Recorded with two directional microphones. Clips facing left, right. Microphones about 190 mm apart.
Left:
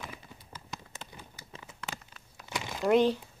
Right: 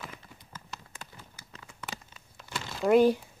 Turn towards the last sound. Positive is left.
turn(degrees=-10)  # may be behind; listen again after turning